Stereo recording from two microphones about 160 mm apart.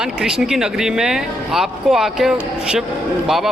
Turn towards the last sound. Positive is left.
turn(degrees=0)  # may be behind; listen again after turning